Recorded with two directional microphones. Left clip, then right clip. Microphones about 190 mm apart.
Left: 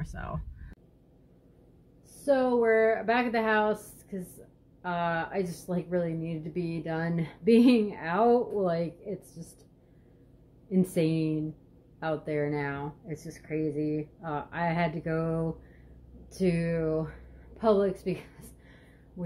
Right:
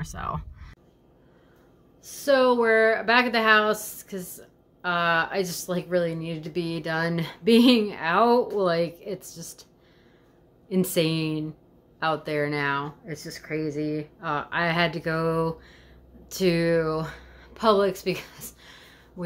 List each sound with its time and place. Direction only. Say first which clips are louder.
0.0 s a woman's voice: right 8 dB; 5° right (ahead or behind)
2.2 s a woman's voice: right 5 dB; 20° right (ahead or behind)
10.7 s a woman's voice: right 4 dB; 10° right (ahead or behind)